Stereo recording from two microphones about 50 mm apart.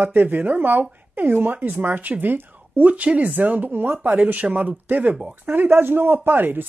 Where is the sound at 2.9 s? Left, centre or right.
Right.